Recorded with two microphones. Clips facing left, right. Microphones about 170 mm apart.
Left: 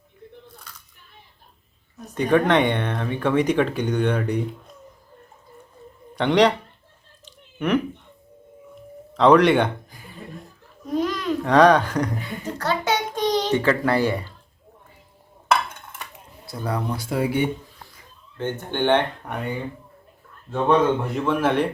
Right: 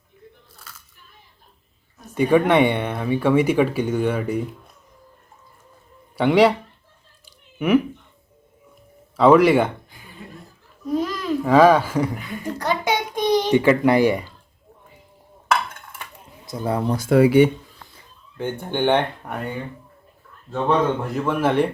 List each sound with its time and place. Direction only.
0.7 s a sound: 5° right (ahead or behind)
2.1 s speech: 10° right (ahead or behind)
6.1 s speech: 5° right (ahead or behind)
9.1 s a child's voice: 5° right (ahead or behind)
16.5 s speech: 25° right (ahead or behind)
17.1 s speech: 85° right
18.3 s speech: 10° right (ahead or behind)
20.7 s speech: centre (ahead or behind)